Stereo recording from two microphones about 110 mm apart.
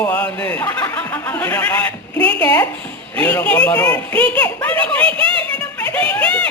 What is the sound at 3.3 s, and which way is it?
Speech, 10° left (ahead or behind).